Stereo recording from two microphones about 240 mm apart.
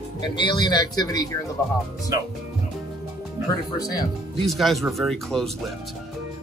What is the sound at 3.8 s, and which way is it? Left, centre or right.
Speech, centre.